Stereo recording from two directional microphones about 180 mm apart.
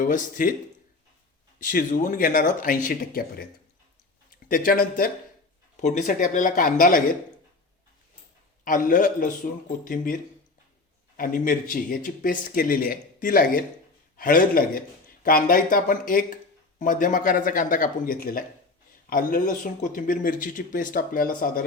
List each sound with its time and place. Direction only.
0.0 s speech: 45° left (ahead or behind)
1.5 s speech: 45° left (ahead or behind)
4.4 s speech: 50° left (ahead or behind)
8.6 s speech: 50° left (ahead or behind)
11.2 s speech: 50° left (ahead or behind)